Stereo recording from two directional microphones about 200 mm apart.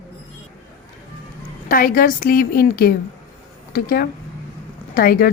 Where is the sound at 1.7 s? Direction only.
45° left (ahead or behind).